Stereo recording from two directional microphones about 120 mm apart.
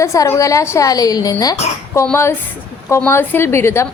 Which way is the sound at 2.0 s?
15° left (ahead or behind).